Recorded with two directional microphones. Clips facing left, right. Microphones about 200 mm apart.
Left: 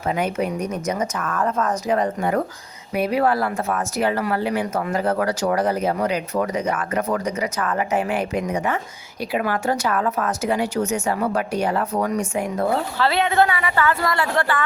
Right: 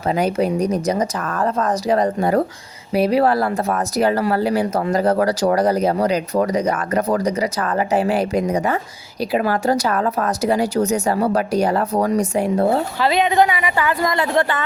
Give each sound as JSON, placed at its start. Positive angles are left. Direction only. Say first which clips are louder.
{"t": 0.1, "sound": "speech", "louder": "right 5 dB", "side_deg": -35}
{"t": 13.0, "sound": "speech", "louder": "right 2 dB", "side_deg": -15}